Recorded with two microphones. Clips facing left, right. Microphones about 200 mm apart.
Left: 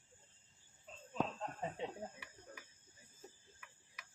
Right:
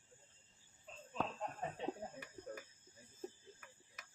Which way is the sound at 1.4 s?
15° right (ahead or behind).